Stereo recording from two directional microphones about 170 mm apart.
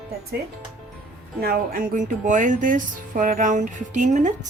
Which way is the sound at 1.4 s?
60° right (ahead or behind).